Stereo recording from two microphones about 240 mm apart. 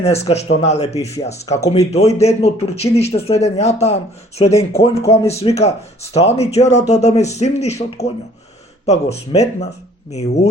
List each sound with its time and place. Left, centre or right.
0.0 s speech: left